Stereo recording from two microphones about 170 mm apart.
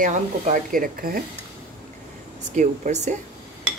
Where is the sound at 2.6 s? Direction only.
45° right (ahead or behind).